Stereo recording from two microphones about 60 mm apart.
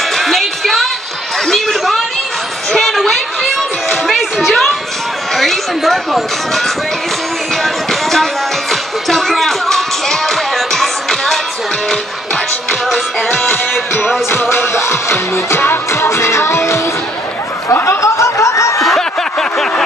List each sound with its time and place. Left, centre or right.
0.1 s music: centre
1.4 s a sound: centre
2.7 s music: centre
5.3 s run: centre
7.6 s music: centre
12.9 s music: centre
14.5 s music: left
14.8 s music: left
17.8 s snicker: left
18.8 s a sound: centre